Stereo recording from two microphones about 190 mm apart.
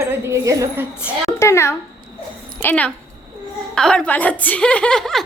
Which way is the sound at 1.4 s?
15° left (ahead or behind).